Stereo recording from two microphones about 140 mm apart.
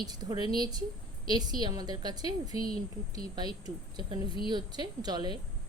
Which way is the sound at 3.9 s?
30° right (ahead or behind).